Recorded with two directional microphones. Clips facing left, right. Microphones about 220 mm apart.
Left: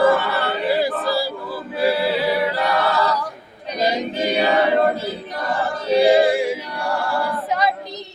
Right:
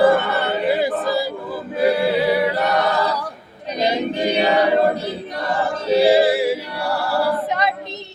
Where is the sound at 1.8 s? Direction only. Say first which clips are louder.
Right 2 dB; 25° right (ahead or behind).